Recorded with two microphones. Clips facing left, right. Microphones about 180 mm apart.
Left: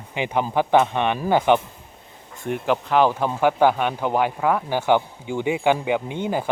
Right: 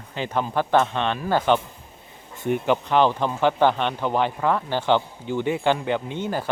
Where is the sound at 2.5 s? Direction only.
Centre (ahead or behind).